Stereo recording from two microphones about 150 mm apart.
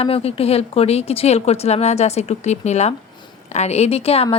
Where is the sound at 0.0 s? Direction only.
40° left (ahead or behind).